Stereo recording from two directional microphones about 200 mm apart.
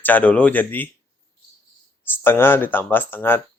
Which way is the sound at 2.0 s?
10° left (ahead or behind).